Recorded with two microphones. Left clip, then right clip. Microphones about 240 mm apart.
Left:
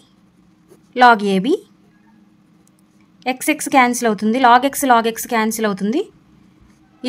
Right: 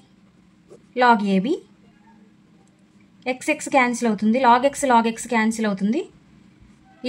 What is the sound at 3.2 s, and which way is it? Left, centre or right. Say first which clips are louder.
A woman's voice: left 4 dB; left.